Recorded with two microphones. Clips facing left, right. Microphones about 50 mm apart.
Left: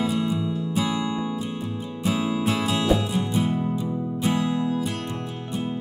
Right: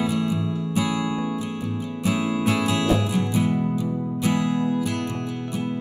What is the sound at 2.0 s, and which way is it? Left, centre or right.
Music, right.